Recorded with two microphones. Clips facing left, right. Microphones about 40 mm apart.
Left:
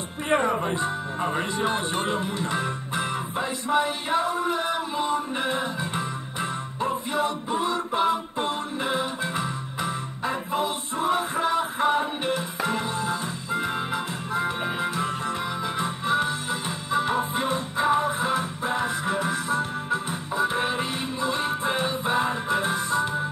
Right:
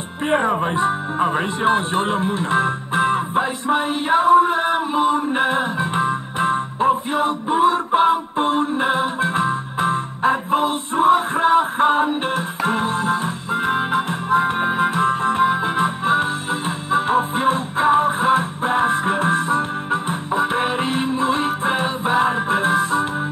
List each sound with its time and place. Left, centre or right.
0.3 s speech: right
3.6 s a sound: right
13.5 s music: right